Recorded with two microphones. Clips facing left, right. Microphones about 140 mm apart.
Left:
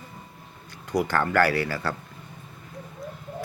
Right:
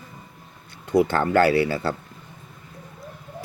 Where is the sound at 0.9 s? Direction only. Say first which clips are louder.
Right 5 dB; 25° right (ahead or behind).